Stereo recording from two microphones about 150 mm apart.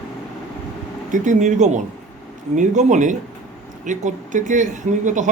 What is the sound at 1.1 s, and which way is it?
Speech, 55° right (ahead or behind).